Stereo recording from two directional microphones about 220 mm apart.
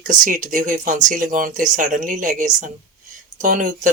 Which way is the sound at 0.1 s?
35° right (ahead or behind).